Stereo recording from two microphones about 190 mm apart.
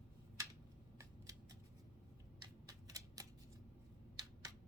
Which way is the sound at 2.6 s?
20° right (ahead or behind).